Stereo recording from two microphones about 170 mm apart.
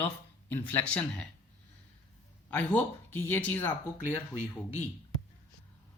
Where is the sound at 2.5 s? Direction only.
10° left (ahead or behind).